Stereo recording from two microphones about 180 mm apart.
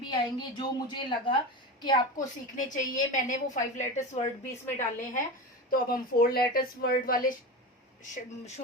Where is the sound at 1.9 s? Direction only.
45° left (ahead or behind).